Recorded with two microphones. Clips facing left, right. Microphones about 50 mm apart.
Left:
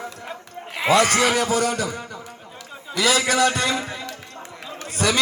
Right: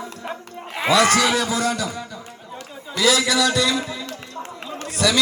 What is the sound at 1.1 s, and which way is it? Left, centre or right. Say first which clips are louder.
A man's voice: even; left.